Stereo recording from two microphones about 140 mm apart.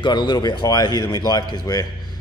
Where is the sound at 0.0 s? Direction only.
35° left (ahead or behind).